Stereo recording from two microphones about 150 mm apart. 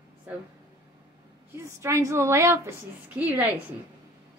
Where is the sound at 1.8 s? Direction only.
20° right (ahead or behind).